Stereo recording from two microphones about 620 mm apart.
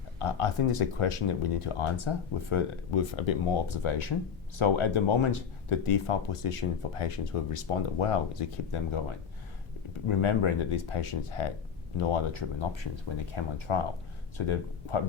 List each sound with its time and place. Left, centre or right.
0.2 s speech: left
10.1 s speech: left